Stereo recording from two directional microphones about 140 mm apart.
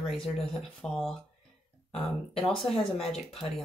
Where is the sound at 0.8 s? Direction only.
5° left (ahead or behind).